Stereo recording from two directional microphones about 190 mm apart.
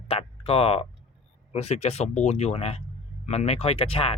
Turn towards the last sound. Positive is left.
turn(degrees=30)  # may be behind; listen again after turning